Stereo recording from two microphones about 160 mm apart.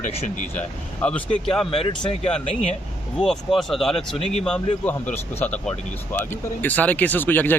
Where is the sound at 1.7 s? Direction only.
35° left (ahead or behind).